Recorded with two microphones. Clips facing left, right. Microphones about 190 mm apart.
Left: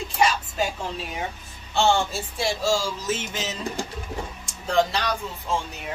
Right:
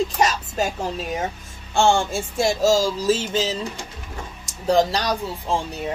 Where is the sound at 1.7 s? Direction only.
50° right (ahead or behind).